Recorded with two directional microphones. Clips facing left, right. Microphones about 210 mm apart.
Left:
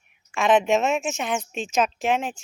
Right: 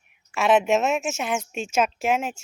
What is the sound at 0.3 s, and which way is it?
Speech, 5° right (ahead or behind).